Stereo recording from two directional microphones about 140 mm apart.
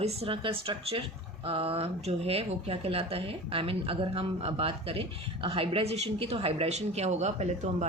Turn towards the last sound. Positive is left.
turn(degrees=-55)  # may be behind; listen again after turning